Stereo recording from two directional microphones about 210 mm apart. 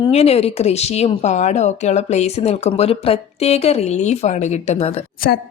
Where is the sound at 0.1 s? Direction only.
30° left (ahead or behind).